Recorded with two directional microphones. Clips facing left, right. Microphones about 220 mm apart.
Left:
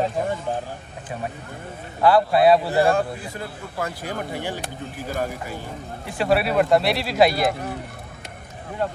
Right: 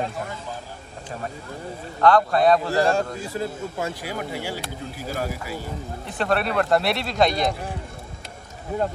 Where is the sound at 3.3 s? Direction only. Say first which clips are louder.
Right 5 dB; 25° right (ahead or behind).